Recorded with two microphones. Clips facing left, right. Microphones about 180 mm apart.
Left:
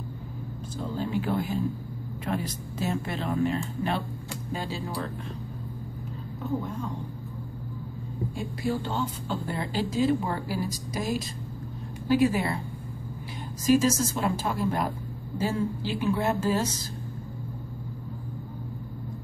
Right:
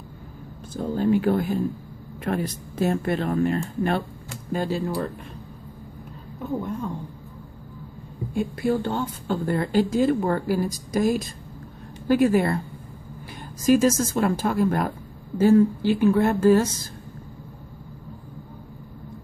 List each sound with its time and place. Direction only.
0.7 s speech: 55° right (ahead or behind)
8.4 s speech: 55° right (ahead or behind)
13.7 s speech: 50° right (ahead or behind)